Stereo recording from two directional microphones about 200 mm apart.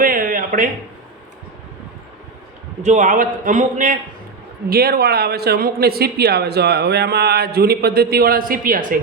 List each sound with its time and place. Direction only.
0.0 s a sound: 45° right (ahead or behind)
2.8 s a man's voice: 40° right (ahead or behind)
4.7 s speech: 50° right (ahead or behind)